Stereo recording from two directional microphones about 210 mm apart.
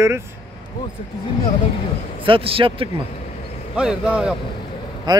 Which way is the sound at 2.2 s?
25° right (ahead or behind).